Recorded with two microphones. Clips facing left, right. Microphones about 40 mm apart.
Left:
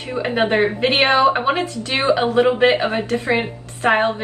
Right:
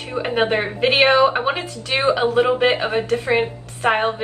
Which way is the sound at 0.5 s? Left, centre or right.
Centre.